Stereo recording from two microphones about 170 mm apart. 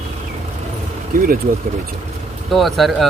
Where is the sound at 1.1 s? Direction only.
60° right (ahead or behind).